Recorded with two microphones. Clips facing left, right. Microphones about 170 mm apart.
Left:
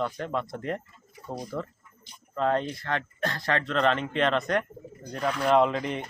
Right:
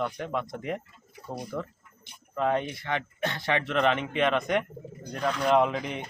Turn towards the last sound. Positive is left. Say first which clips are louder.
# left 2 dB
turn(degrees=0)  # may be behind; listen again after turning